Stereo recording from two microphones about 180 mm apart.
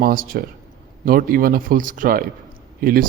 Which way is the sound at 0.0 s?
50° right (ahead or behind).